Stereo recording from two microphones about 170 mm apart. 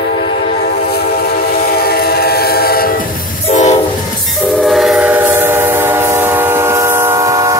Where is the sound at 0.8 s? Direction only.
70° left (ahead or behind).